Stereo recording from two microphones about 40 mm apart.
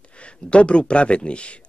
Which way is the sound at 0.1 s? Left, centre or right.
Left.